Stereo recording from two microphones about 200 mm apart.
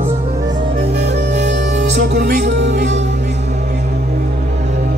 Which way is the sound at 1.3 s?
40° right (ahead or behind).